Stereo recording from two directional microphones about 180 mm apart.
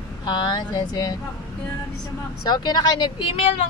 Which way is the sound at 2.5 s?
25° left (ahead or behind).